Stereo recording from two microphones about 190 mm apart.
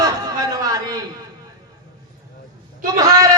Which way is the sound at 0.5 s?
20° right (ahead or behind).